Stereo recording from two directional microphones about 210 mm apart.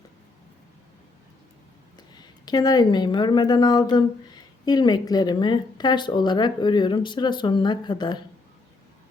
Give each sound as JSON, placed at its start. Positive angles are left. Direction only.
{"t": 2.1, "sound": "speech", "side_deg": 20}